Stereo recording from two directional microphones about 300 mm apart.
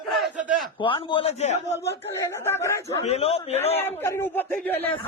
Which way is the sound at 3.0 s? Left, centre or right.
Left.